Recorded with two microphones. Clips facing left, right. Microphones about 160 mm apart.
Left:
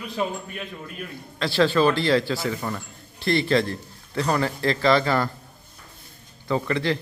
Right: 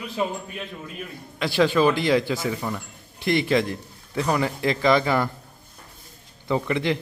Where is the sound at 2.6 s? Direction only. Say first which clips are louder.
Even; 5° right (ahead or behind).